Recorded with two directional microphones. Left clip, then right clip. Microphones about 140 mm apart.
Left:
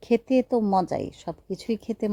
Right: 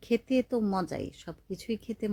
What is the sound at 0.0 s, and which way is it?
A woman's voice, 35° left (ahead or behind).